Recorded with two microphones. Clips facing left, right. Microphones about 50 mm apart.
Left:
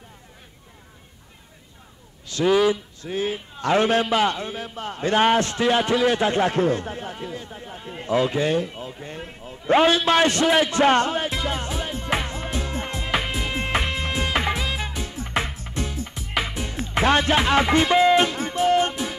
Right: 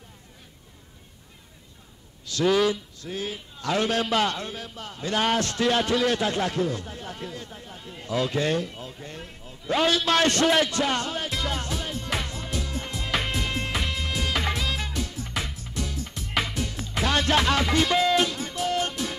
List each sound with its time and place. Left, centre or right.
2.2 s a man's voice: centre
4.1 s a man's voice: centre; by 7.1 s left
7.1 s a man's voice: centre
10.2 s a man's voice: centre
10.8 s music: left
11.1 s music: left
13.1 s music: centre
13.7 s music: left
16.7 s music: left
17.2 s music: left